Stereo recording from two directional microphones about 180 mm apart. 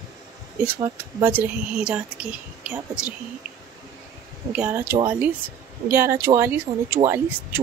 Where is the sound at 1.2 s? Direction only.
10° right (ahead or behind).